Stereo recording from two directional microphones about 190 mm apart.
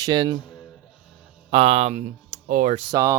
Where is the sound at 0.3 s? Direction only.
25° left (ahead or behind).